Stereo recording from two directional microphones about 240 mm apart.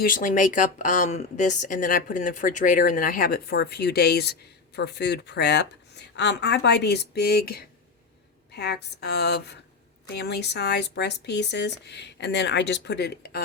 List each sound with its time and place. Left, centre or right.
0.0 s speech: left